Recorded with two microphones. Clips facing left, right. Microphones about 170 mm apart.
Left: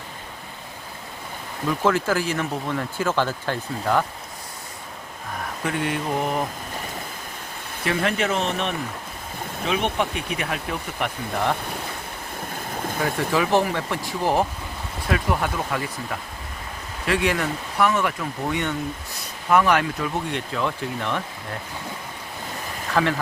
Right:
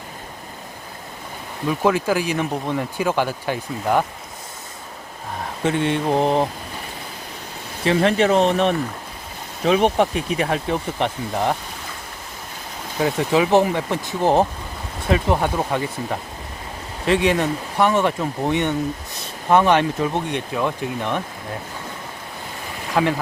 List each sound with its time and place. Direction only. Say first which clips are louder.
1.8 s speech: right 2 dB; 15° right (ahead or behind)
5.6 s speech: right 6 dB; 25° right (ahead or behind)
7.9 s speech: right 6 dB; 30° right (ahead or behind)
13.1 s speech: right 5 dB; 20° right (ahead or behind)
23.0 s speech: right 2 dB; 15° right (ahead or behind)